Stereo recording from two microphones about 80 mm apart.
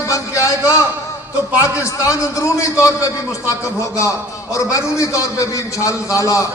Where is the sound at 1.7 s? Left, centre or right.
Left.